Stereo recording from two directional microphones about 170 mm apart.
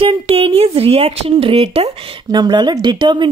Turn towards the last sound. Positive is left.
turn(degrees=-30)  # may be behind; listen again after turning